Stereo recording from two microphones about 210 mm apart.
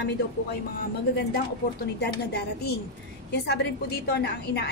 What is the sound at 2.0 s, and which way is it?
A woman's voice, 50° left (ahead or behind).